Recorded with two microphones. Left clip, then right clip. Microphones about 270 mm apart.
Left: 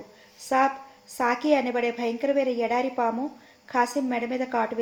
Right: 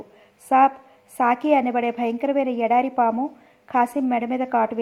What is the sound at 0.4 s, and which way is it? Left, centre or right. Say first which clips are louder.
A woman's voice: right 6 dB; right.